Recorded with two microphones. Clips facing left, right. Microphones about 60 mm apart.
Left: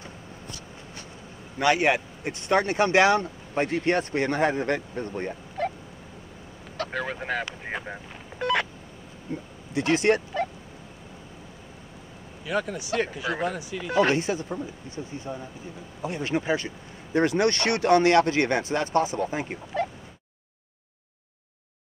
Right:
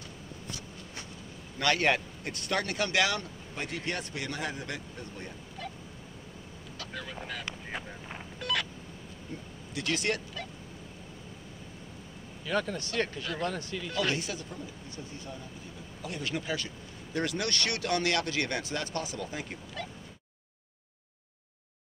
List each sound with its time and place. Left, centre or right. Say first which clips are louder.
1.6 s speech: left 5 dB; centre; by 5.7 s left
6.8 s a sound: left 11 dB; left
8.4 s a sound: left 8 dB; left
9.3 s speech: left 10 dB; left
12.4 s speech: left 4 dB; centre
13.8 s speech: left 10 dB; left